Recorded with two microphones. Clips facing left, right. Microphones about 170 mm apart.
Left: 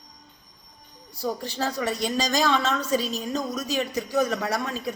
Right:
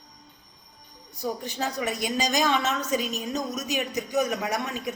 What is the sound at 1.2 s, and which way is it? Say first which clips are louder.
A woman's voice: left 2 dB; 15° right (ahead or behind).